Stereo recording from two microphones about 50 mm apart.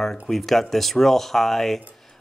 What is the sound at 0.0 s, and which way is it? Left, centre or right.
Speech, centre.